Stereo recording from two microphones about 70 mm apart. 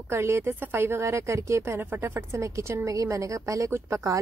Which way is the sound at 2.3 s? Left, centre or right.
Right.